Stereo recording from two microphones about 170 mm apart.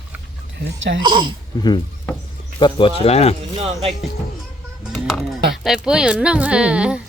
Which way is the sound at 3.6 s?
35° right (ahead or behind).